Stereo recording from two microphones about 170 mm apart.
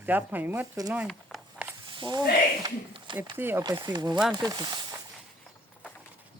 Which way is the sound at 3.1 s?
10° right (ahead or behind).